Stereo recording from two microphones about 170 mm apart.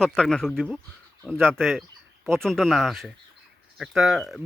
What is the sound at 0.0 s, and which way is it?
Speech, 5° left (ahead or behind).